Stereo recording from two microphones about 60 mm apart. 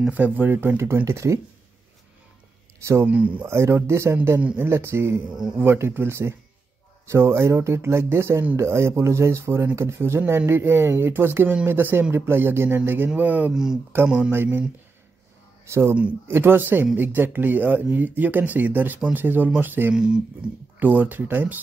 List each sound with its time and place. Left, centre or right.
0.1 s speech: right
1.0 s speech: right
2.8 s speech: right
3.1 s speech: right
3.4 s speech: right
14.0 s speech: centre
14.3 s speech: right
15.6 s speech: right
16.3 s speech: right
19.9 s speech: centre
20.8 s speech: right